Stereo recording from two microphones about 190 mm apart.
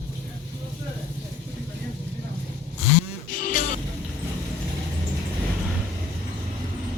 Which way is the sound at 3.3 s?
45° left (ahead or behind).